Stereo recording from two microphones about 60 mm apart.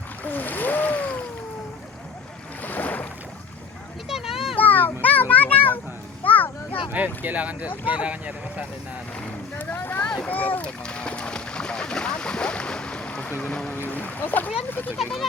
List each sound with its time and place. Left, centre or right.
0.3 s rowboat: left
2.6 s boat: left
4.1 s children playing: centre
4.5 s a sound: left
6.9 s speech: right
9.6 s boat: left
10.1 s boat: left
10.8 s boat: centre
13.5 s speech: centre
13.7 s speech: left